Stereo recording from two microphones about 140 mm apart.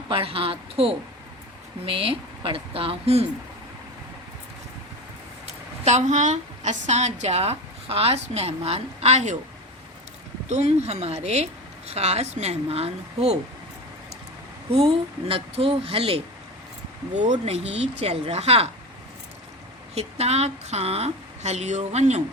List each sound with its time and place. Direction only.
0.1 s speech: 40° right (ahead or behind)
5.5 s a woman's voice: 55° right (ahead or behind)
10.5 s speech: 55° right (ahead or behind)
15.3 s speech: 40° right (ahead or behind)
17.2 s speech: 60° right (ahead or behind)
19.9 s speech: 50° right (ahead or behind)